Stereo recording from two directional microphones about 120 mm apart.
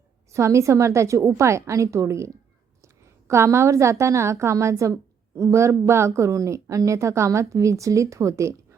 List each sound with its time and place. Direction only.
0.3 s a woman's voice: 25° right (ahead or behind)